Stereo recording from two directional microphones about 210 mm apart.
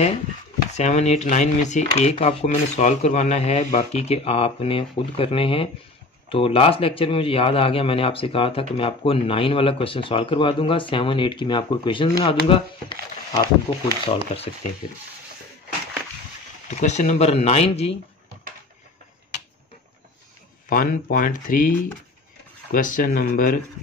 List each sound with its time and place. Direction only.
0.7 s a man's voice: 30° left (ahead or behind)
16.6 s a man's voice: 35° left (ahead or behind)
20.7 s speech: 40° left (ahead or behind)